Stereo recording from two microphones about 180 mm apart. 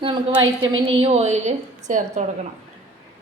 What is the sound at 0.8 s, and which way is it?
A woman's voice, 30° right (ahead or behind).